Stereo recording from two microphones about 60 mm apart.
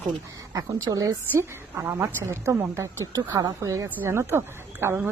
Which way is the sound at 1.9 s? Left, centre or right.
Right.